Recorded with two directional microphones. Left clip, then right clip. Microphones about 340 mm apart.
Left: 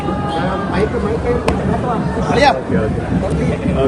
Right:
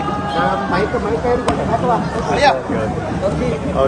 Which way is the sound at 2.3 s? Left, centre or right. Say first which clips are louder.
Left 1 dB; left.